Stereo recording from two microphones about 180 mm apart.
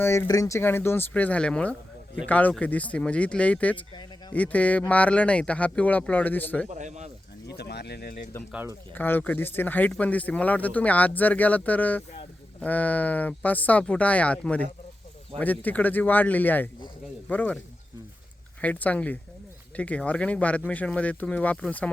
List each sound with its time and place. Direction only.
0.0 s speech: 15° left (ahead or behind)
6.7 s speech: 40° right (ahead or behind)
7.4 s speech: 65° left (ahead or behind)
9.0 s speech: 10° left (ahead or behind)
18.6 s speech: 10° left (ahead or behind)